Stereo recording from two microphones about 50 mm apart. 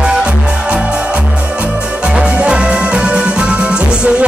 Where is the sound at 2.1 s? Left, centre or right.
Centre.